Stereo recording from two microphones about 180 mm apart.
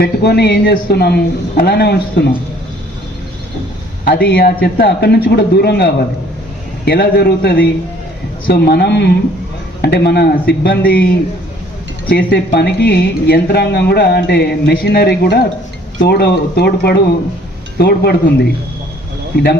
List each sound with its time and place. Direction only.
0.0 s speech: 65° left (ahead or behind)
4.0 s speech: 60° left (ahead or behind)